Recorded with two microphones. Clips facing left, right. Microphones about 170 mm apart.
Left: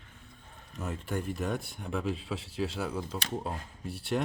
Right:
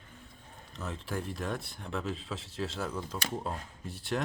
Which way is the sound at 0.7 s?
10° left (ahead or behind).